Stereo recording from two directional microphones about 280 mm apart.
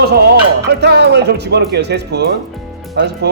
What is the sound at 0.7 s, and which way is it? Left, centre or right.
A man's voice, right.